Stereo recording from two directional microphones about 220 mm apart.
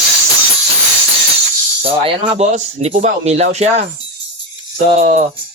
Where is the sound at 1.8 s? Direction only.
25° right (ahead or behind).